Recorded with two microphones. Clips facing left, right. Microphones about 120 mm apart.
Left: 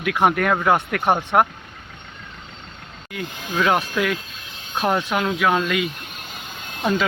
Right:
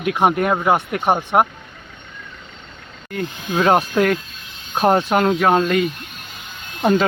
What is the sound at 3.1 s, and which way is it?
Speech, 40° right (ahead or behind).